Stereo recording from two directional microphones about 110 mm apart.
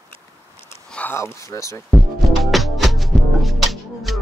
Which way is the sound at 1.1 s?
25° left (ahead or behind).